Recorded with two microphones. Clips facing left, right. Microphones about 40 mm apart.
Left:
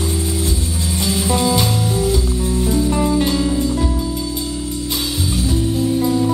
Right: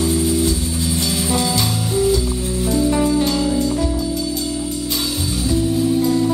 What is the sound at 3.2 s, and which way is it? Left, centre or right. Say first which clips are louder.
Music: left 1 dB; centre.